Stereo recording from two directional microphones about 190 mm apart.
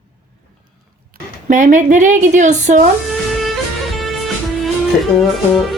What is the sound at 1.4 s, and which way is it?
A woman's voice, 40° right (ahead or behind).